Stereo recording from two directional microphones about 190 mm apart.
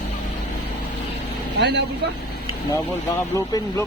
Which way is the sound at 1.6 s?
65° right (ahead or behind).